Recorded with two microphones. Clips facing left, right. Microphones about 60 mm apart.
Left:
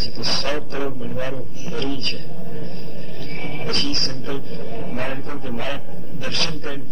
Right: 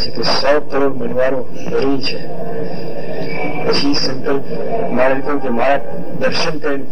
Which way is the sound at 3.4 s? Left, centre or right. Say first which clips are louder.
Right 9 dB; right.